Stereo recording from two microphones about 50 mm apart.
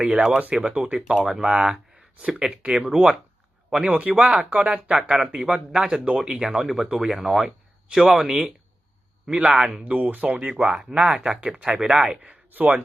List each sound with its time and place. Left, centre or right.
0.0 s speech: centre
1.5 s speech: right
4.4 s speech: right
4.9 s speech: centre
9.3 s speech: right
9.8 s speech: right
10.7 s speech: centre
10.9 s speech: right
11.2 s speech: centre
11.9 s speech: right